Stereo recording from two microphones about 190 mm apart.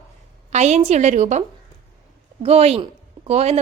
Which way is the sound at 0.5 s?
35° right (ahead or behind).